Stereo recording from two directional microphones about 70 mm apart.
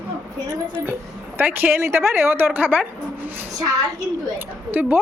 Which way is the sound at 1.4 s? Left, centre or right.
Right.